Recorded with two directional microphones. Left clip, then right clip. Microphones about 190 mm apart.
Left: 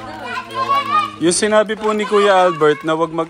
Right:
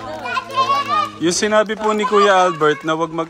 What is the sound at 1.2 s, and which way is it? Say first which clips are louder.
Speech: left 1 dB; 20° right (ahead or behind).